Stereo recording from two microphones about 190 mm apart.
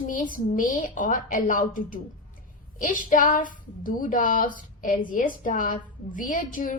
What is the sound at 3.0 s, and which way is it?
A woman's voice, 45° left (ahead or behind).